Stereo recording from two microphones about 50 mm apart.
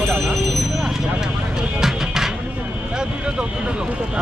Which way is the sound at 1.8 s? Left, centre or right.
Centre.